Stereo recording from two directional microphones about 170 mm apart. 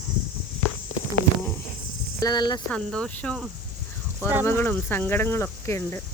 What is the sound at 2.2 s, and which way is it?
Speech, 25° left (ahead or behind).